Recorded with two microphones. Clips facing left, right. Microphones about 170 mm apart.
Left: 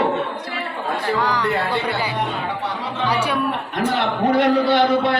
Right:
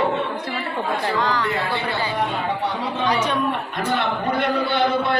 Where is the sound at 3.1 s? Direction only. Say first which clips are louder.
Left 1 dB; 10° left (ahead or behind).